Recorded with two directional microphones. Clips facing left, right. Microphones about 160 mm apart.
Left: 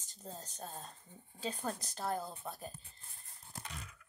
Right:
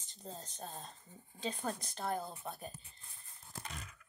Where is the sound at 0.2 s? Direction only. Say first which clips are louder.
Even; 10° left (ahead or behind).